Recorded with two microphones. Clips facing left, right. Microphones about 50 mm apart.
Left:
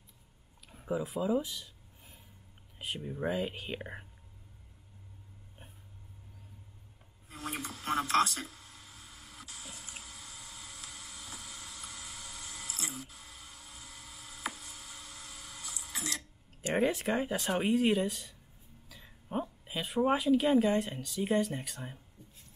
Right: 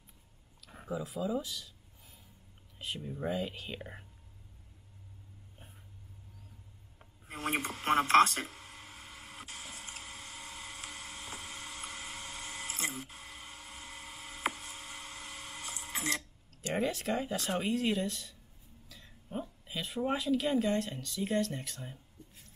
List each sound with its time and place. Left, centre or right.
0.8 s speech: centre
2.8 s speech: centre
7.2 s a sound: right
16.6 s speech: centre
18.9 s a sound: centre
19.3 s speech: left